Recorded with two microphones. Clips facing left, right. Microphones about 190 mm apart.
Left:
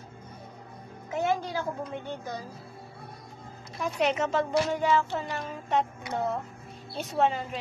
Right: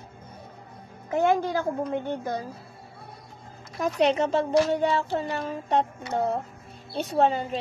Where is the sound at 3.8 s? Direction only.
35° right (ahead or behind).